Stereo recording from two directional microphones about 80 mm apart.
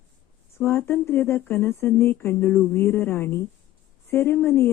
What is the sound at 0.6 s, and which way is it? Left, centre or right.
A woman's voice, left.